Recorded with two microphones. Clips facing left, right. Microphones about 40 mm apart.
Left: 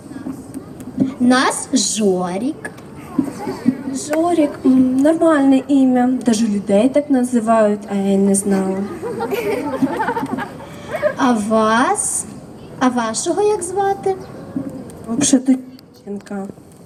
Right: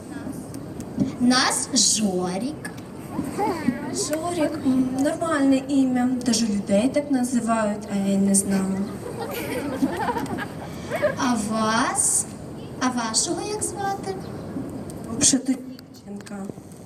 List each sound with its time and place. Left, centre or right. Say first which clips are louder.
0.5 s a sound: left 4 dB; left
2.1 s a woman's voice: left 6 dB; left
3.3 s clip-clop: left 4 dB; right
4.2 s a woman's voice: left 12 dB; left
9.6 s speech: left 6 dB; left
9.9 s chatter: left 6 dB; left
11.1 s a woman's voice: left 8 dB; left